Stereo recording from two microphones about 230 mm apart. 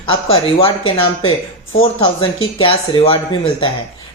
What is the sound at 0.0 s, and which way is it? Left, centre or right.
Speech, left.